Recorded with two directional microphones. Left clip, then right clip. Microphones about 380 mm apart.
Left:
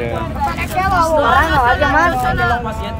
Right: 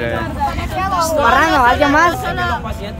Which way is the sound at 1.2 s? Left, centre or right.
Right.